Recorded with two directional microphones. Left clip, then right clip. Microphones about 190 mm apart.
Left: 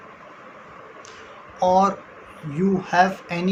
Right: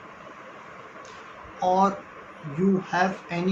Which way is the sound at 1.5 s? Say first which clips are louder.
Left 4 dB; 65° left (ahead or behind).